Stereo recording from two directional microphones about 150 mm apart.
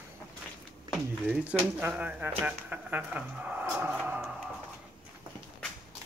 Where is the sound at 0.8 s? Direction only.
Centre (ahead or behind).